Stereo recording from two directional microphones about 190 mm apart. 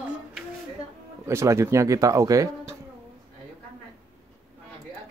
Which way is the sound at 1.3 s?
15° right (ahead or behind).